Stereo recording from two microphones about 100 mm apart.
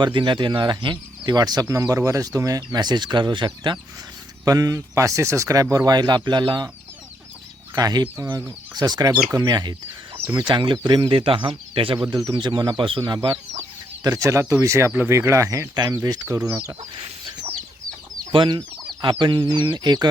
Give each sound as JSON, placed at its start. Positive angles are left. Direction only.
{"t": 0.0, "sound": "speech", "side_deg": -50}
{"t": 4.4, "sound": "speech", "side_deg": -35}
{"t": 7.8, "sound": "speech", "side_deg": -40}
{"t": 8.2, "sound": "speech", "side_deg": -30}
{"t": 8.7, "sound": "speech", "side_deg": -40}
{"t": 12.1, "sound": "speech", "side_deg": -40}
{"t": 12.7, "sound": "speech", "side_deg": -60}
{"t": 14.0, "sound": "speech", "side_deg": -35}
{"t": 14.9, "sound": "speech", "side_deg": -20}
{"t": 15.2, "sound": "speech", "side_deg": -30}
{"t": 18.3, "sound": "speech", "side_deg": -55}